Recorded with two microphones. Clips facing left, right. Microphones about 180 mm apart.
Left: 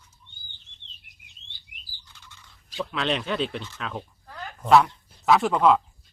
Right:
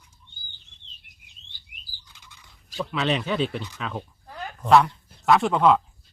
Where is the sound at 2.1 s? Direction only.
15° right (ahead or behind).